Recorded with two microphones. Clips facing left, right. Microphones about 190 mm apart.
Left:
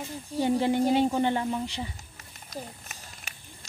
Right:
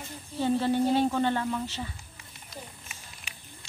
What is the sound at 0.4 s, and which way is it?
A woman's voice, 15° left (ahead or behind).